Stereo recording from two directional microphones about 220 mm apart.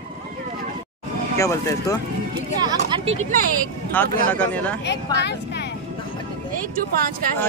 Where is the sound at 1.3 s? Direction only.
15° left (ahead or behind).